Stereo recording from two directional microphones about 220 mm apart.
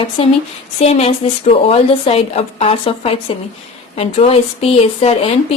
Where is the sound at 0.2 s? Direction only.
25° left (ahead or behind).